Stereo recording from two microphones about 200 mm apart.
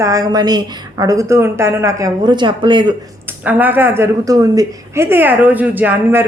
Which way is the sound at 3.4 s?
10° right (ahead or behind).